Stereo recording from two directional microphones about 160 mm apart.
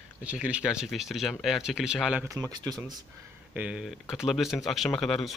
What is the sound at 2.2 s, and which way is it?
Speech, 20° right (ahead or behind).